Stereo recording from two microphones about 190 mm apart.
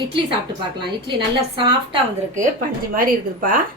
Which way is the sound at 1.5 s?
25° right (ahead or behind).